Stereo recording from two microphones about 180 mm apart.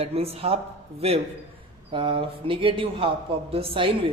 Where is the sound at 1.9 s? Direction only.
30° right (ahead or behind).